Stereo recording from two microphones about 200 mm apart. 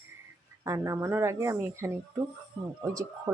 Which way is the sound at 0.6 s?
15° right (ahead or behind).